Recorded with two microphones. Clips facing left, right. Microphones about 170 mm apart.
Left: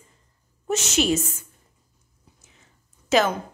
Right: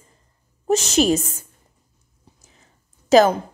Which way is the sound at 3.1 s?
35° right (ahead or behind).